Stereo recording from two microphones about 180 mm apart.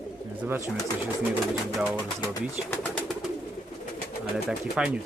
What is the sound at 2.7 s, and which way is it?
Bird, 5° left (ahead or behind).